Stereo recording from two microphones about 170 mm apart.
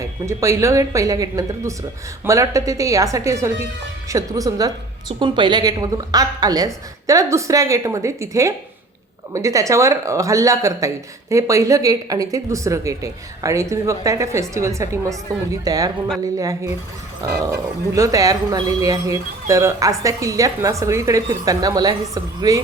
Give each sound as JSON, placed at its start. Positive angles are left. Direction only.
{"t": 0.0, "sound": "a woman's voice", "side_deg": -15}